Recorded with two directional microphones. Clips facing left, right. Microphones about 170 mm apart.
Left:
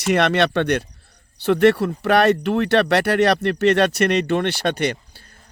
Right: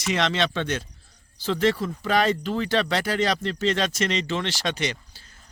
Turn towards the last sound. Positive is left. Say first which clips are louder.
# left 6 dB
turn(degrees=55)  # may be behind; listen again after turning